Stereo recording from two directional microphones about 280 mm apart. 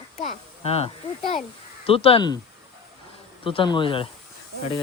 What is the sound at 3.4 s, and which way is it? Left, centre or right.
Speech, centre.